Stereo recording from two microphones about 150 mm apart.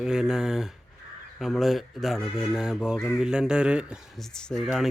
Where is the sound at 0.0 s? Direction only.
5° right (ahead or behind).